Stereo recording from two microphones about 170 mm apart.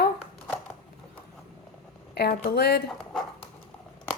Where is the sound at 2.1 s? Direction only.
70° left (ahead or behind).